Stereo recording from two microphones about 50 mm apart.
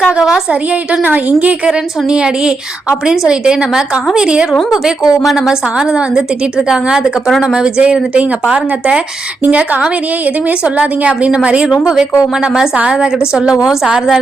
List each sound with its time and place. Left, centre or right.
0.0 s a woman's voice: centre
0.7 s a woman's voice: right
1.6 s a woman's voice: centre
5.7 s a woman's voice: centre